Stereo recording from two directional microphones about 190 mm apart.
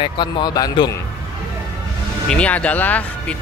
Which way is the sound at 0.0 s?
25° left (ahead or behind).